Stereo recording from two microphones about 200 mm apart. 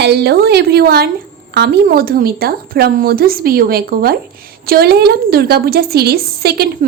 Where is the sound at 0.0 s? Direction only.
55° right (ahead or behind).